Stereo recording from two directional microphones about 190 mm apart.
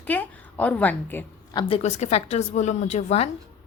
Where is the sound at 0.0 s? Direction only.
10° left (ahead or behind).